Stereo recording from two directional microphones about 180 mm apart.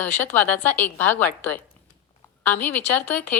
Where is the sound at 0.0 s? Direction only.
10° left (ahead or behind).